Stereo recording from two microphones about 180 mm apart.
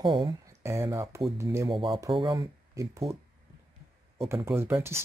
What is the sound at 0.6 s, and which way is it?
Speech, 15° right (ahead or behind).